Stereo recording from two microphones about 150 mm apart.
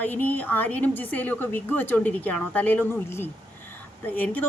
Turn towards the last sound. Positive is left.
turn(degrees=10)  # may be behind; listen again after turning